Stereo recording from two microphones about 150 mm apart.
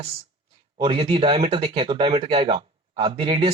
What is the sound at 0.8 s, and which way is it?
Speech, 40° right (ahead or behind).